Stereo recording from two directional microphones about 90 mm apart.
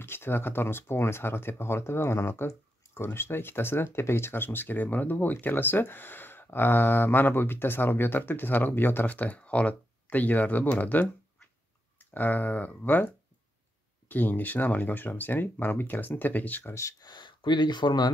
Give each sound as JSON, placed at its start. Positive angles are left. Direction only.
{"t": 0.0, "sound": "speech", "side_deg": 25}
{"t": 12.1, "sound": "speech", "side_deg": 20}
{"t": 17.0, "sound": "speech", "side_deg": 55}